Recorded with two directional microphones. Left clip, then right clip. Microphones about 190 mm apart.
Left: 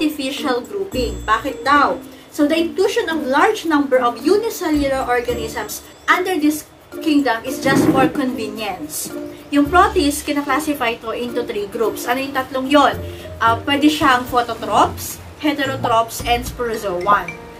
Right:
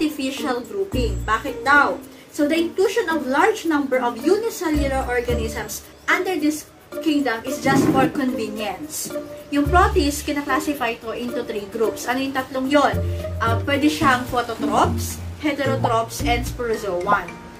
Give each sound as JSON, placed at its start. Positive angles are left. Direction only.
{"t": 0.0, "sound": "a woman's voice", "side_deg": 15}